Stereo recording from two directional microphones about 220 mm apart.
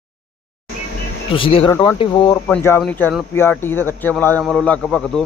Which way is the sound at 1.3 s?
25° left (ahead or behind).